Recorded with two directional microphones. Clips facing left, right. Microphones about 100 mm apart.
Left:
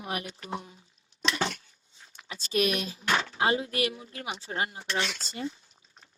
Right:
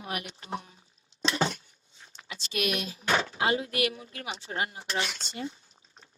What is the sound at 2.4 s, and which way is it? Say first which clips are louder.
Speech: left 3 dB; 40° left (ahead or behind).